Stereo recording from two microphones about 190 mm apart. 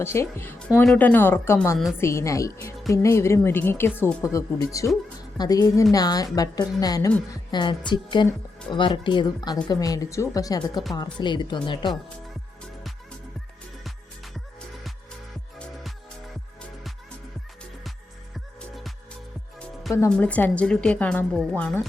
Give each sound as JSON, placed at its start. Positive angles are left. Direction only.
{"t": 0.0, "sound": "speech", "side_deg": 15}
{"t": 18.7, "sound": "music", "side_deg": 0}
{"t": 19.9, "sound": "speech", "side_deg": 10}